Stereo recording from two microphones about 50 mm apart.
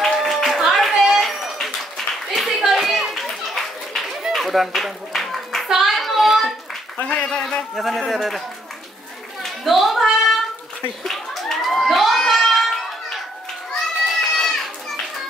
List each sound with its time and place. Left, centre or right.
0.0 s clapping: centre
4.3 s a sound: centre
5.7 s child singing: centre
7.0 s a man's voice: left
7.7 s speech: centre
9.4 s a sound: centre
14.3 s children playing: centre